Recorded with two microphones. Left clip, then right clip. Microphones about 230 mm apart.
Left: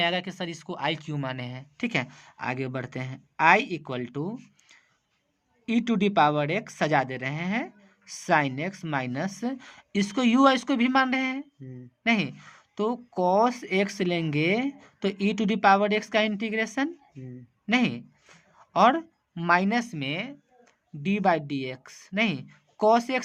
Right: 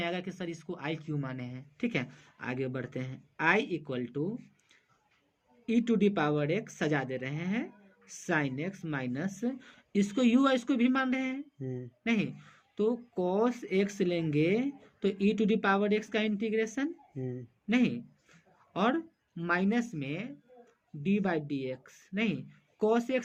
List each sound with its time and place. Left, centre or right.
0.0 s speech: left